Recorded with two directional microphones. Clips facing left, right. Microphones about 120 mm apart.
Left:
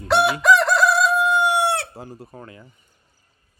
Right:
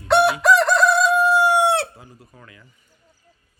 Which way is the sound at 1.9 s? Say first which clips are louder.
Left 8 dB; 35° left (ahead or behind).